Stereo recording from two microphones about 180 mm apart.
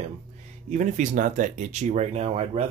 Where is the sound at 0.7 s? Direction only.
45° right (ahead or behind).